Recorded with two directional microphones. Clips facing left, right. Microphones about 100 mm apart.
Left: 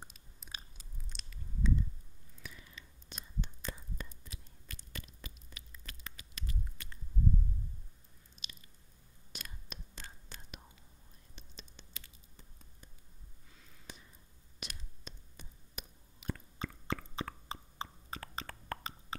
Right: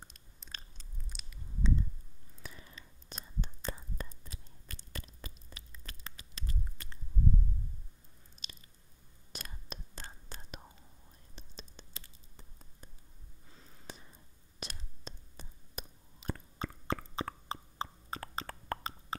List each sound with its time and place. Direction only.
0.1 s biting: 5° left (ahead or behind)
1.0 s squish: 10° right (ahead or behind)
2.4 s whispering: 35° right (ahead or behind)
8.4 s squish: 35° right (ahead or behind)
9.3 s whispering: 35° right (ahead or behind)
13.5 s a sound: 35° right (ahead or behind)
14.6 s whispering: 35° right (ahead or behind)